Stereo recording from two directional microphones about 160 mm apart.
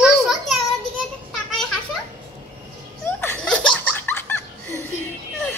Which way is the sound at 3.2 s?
5° left (ahead or behind).